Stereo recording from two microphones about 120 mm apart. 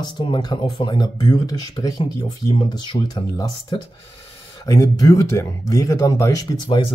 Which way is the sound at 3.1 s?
35° left (ahead or behind).